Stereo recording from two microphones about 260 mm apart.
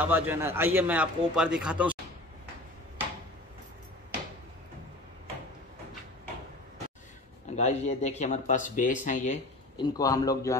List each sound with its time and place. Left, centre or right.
0.0 s a man's voice: centre
7.5 s speech: left